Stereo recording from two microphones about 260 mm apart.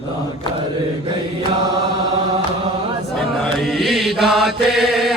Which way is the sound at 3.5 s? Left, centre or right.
Centre.